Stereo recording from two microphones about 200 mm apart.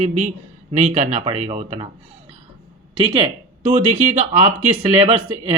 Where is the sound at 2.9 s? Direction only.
30° right (ahead or behind).